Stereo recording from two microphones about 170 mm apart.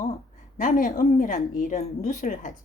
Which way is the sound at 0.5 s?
50° left (ahead or behind).